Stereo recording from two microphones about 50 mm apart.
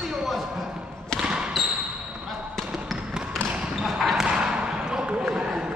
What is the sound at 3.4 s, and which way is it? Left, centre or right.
Basketball bounce, centre.